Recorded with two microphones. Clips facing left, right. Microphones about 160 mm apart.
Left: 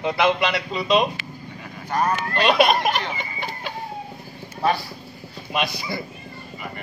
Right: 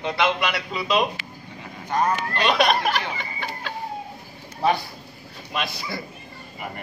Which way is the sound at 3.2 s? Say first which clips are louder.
Left 1 dB; 15° left (ahead or behind).